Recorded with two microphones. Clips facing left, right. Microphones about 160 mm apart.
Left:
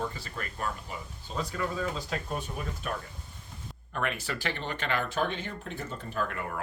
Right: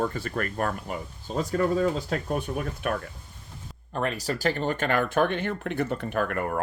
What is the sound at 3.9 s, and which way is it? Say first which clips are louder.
Speech: right 5 dB; 35° right (ahead or behind).